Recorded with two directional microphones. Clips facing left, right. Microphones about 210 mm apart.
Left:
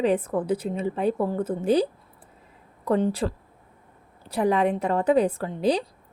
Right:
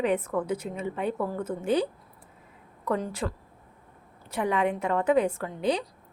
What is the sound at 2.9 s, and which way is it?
A woman's voice, 30° left (ahead or behind).